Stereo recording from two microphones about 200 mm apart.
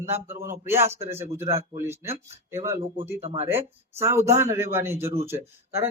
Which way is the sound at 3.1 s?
30° right (ahead or behind).